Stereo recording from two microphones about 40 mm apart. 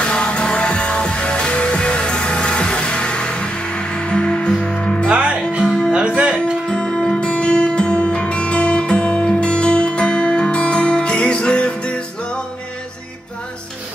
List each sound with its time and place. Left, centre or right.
0.0 s music: left
5.1 s music: right
6.7 s music: left